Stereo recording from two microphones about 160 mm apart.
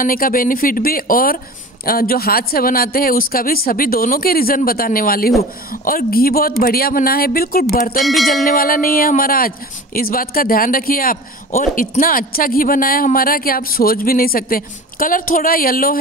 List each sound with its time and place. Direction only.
0.0 s a man's voice: 60° left (ahead or behind)
8.0 s music: centre (ahead or behind)
8.5 s a man's voice: 60° left (ahead or behind)